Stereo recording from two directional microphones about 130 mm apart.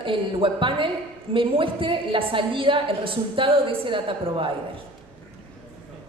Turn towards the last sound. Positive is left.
turn(degrees=-40)  # may be behind; listen again after turning